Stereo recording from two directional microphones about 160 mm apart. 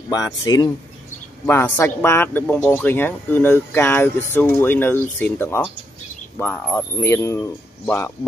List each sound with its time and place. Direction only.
0.1 s speech: 25° left (ahead or behind)
1.4 s a man's voice: 10° left (ahead or behind)